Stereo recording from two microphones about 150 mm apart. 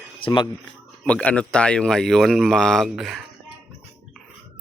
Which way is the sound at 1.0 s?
10° left (ahead or behind).